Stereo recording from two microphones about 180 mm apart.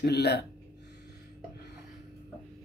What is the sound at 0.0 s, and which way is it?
Speech, 65° left (ahead or behind).